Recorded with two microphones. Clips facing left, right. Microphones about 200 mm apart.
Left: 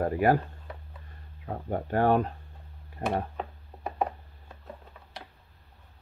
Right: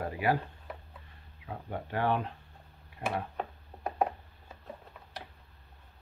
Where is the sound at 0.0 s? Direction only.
45° left (ahead or behind).